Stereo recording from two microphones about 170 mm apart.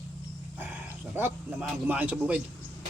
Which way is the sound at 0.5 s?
10° right (ahead or behind).